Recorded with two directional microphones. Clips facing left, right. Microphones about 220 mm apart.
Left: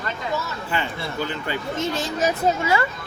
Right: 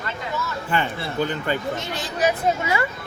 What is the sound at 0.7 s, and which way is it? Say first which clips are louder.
Speech: right 4 dB; 50° right (ahead or behind).